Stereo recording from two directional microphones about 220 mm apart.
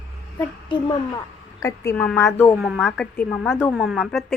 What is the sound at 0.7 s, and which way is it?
A woman's voice, 20° left (ahead or behind).